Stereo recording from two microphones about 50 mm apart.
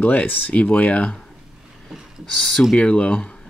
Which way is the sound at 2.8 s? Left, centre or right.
Left.